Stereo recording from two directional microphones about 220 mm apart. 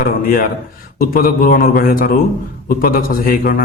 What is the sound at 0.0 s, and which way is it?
A man's voice, 40° left (ahead or behind).